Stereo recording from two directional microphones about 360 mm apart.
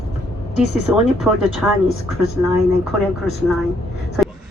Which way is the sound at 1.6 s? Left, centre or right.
Centre.